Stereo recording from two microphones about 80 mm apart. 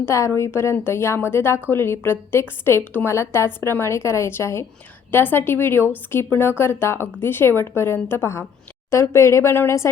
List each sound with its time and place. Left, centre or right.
0.0 s a woman's voice: left